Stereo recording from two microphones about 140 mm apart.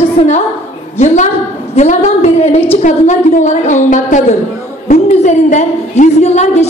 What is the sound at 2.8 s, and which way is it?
A man's voice, 60° left (ahead or behind).